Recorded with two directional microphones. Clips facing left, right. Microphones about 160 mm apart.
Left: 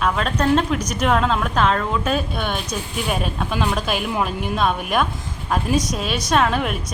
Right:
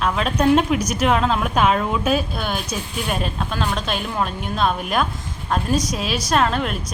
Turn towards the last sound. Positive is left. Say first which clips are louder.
# left 1 dB
turn(degrees=5)  # may be behind; listen again after turning